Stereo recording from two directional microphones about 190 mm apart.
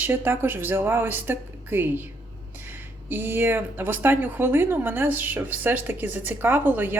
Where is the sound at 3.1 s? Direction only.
10° right (ahead or behind).